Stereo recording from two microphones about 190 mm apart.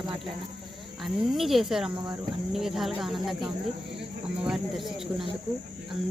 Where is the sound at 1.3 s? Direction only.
Centre (ahead or behind).